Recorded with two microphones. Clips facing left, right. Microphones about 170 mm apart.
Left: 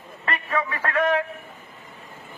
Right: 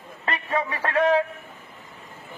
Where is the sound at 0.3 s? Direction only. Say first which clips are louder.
Even; 30° right (ahead or behind).